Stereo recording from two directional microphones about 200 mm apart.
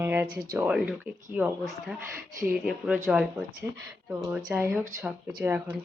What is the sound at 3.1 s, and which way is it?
A woman's voice, 5° right (ahead or behind).